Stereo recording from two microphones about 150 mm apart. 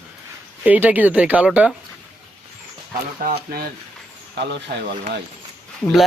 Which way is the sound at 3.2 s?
80° right.